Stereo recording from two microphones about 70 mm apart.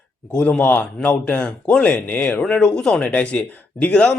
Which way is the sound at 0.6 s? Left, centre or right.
Left.